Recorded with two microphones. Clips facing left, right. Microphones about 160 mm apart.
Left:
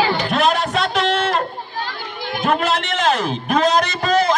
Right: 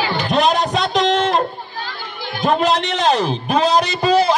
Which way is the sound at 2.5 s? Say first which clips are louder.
Right 3 dB; 20° right (ahead or behind).